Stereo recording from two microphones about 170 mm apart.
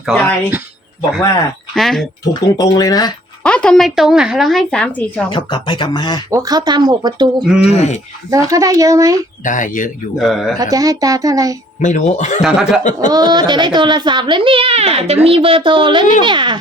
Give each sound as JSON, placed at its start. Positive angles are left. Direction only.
{"t": 0.0, "sound": "a woman's voice", "side_deg": 0}
{"t": 1.7, "sound": "a woman's voice", "side_deg": 0}
{"t": 2.2, "sound": "speech", "side_deg": 20}
{"t": 3.4, "sound": "a woman's voice", "side_deg": 5}
{"t": 5.3, "sound": "speech", "side_deg": 30}
{"t": 6.3, "sound": "a child's voice", "side_deg": -20}
{"t": 7.6, "sound": "speech", "side_deg": 40}
{"t": 8.3, "sound": "a child's voice", "side_deg": -20}
{"t": 9.4, "sound": "speech", "side_deg": 50}
{"t": 10.2, "sound": "a woman's voice", "side_deg": 0}
{"t": 10.6, "sound": "a child's voice", "side_deg": -20}
{"t": 11.8, "sound": "speech", "side_deg": 45}
{"t": 12.4, "sound": "a woman's voice", "side_deg": -5}
{"t": 13.1, "sound": "a child's voice", "side_deg": -25}